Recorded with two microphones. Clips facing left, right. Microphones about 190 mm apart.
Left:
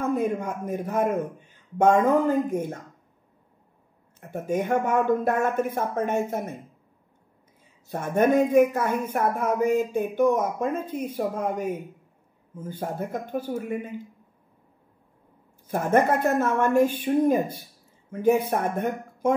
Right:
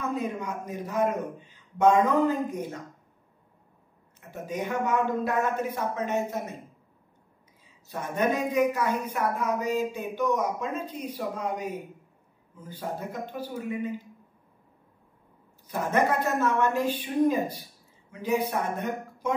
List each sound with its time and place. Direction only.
0.0 s speech: 50° left (ahead or behind)
4.3 s speech: 55° left (ahead or behind)
7.9 s speech: 55° left (ahead or behind)
15.6 s speech: 50° left (ahead or behind)